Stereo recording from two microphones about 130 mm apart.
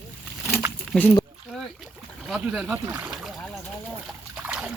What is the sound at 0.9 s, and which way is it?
Speech, 10° left (ahead or behind).